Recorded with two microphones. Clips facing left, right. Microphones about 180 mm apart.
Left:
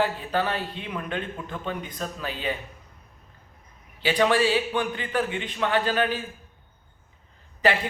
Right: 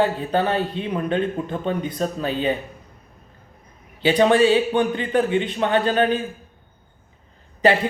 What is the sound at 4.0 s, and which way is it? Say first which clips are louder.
Speech: right 6 dB; 30° right (ahead or behind).